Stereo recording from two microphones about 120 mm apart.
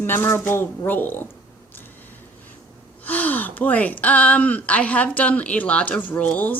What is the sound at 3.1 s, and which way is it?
Speech, 15° left (ahead or behind).